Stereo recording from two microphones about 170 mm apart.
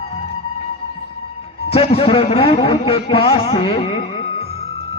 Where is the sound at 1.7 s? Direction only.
35° left (ahead or behind).